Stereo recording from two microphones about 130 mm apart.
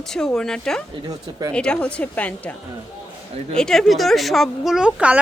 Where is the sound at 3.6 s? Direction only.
5° left (ahead or behind).